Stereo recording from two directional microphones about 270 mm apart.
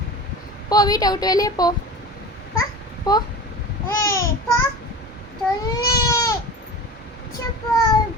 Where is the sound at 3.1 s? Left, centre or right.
Centre.